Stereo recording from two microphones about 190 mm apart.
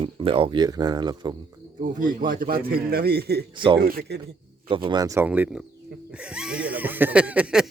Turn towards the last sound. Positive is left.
turn(degrees=-5)  # may be behind; listen again after turning